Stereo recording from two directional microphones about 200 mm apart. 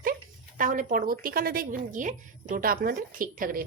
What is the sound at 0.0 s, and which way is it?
A woman's voice, 45° right (ahead or behind).